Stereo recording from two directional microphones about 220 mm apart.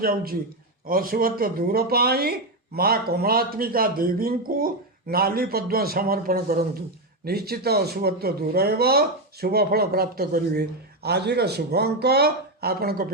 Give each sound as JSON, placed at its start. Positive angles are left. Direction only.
{"t": 0.0, "sound": "speech", "side_deg": -40}